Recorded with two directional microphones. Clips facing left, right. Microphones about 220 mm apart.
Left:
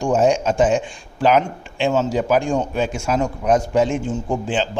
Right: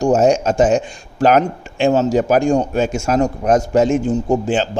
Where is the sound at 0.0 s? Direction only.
40° right (ahead or behind).